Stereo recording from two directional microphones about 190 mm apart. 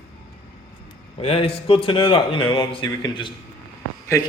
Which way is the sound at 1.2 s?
30° left (ahead or behind).